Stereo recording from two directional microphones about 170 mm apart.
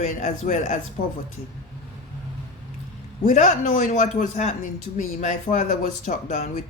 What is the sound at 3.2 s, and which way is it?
Speech, 45° left (ahead or behind).